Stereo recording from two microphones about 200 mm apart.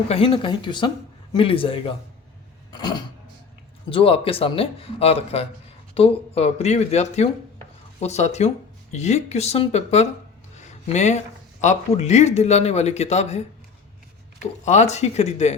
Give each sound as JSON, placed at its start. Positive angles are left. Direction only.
{"t": 0.1, "sound": "a man's voice", "side_deg": 25}
{"t": 10.6, "sound": "a sound", "side_deg": 35}
{"t": 11.6, "sound": "a man's voice", "side_deg": 35}
{"t": 14.6, "sound": "a man's voice", "side_deg": 35}